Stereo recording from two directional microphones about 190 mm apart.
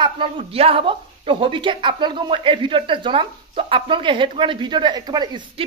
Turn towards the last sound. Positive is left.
turn(degrees=-20)  # may be behind; listen again after turning